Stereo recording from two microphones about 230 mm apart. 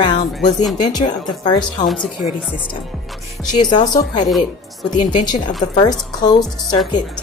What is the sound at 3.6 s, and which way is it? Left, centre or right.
Speech, centre.